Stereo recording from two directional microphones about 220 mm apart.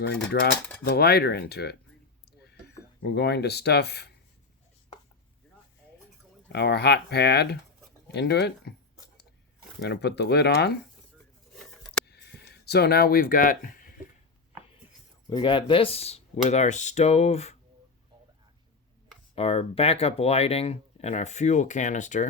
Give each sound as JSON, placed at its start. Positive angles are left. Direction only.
{"t": 0.3, "sound": "speech", "side_deg": 50}
{"t": 3.0, "sound": "speech", "side_deg": 50}
{"t": 6.5, "sound": "speech", "side_deg": 50}
{"t": 9.8, "sound": "speech", "side_deg": 50}
{"t": 11.5, "sound": "a sound", "side_deg": 5}
{"t": 12.6, "sound": "speech", "side_deg": 45}
{"t": 15.3, "sound": "speech", "side_deg": 20}
{"t": 19.4, "sound": "speech", "side_deg": 25}